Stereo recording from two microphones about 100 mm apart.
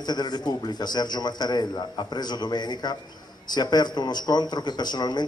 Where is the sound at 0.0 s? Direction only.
45° left (ahead or behind).